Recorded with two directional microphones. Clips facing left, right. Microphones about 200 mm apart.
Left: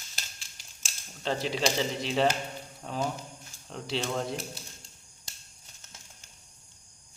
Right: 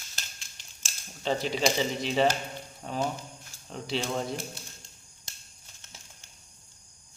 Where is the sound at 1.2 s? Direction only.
Centre (ahead or behind).